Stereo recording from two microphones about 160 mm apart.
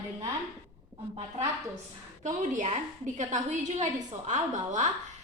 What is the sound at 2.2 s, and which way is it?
A woman's voice, 50° right (ahead or behind).